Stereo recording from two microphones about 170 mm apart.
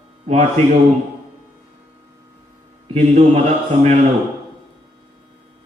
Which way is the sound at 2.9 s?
40° right (ahead or behind).